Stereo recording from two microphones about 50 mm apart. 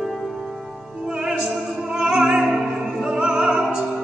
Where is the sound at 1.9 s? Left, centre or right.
Centre.